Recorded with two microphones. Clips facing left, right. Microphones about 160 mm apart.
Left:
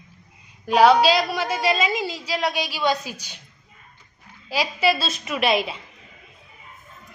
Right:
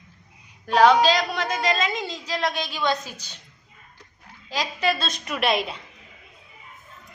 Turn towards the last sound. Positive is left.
turn(degrees=0)  # may be behind; listen again after turning